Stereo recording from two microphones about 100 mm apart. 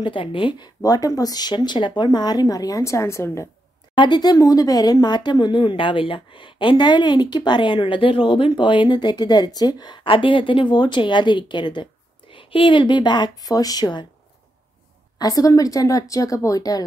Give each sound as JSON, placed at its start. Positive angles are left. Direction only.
{"t": 0.0, "sound": "speech", "side_deg": 55}
{"t": 0.8, "sound": "speech", "side_deg": 35}
{"t": 3.9, "sound": "speech", "side_deg": 50}
{"t": 10.0, "sound": "speech", "side_deg": 55}
{"t": 15.1, "sound": "speech", "side_deg": 40}